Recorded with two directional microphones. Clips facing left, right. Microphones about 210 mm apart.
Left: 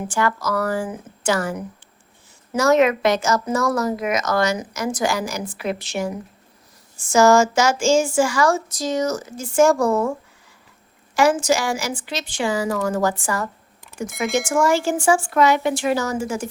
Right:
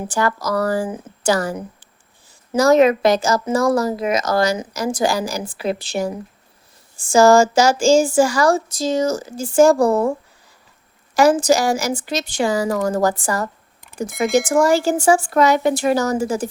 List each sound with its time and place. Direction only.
0.1 s speech: 35° right (ahead or behind)